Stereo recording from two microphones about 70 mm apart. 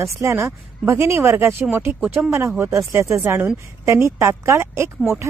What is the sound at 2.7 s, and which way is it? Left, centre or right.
Speech, right.